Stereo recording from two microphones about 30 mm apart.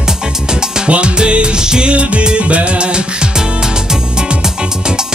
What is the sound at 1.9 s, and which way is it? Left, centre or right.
Music, right.